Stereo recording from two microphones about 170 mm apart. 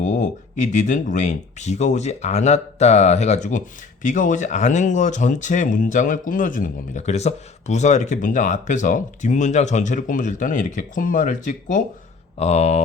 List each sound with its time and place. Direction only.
0.0 s speech: 45° left (ahead or behind)